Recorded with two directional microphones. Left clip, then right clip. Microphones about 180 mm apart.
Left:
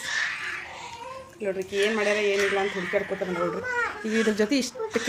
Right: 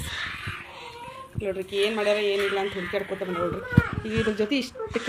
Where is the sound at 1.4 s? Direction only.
Centre (ahead or behind).